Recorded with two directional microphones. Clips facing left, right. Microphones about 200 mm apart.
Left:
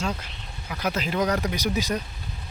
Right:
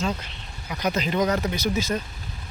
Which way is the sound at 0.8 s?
5° left (ahead or behind).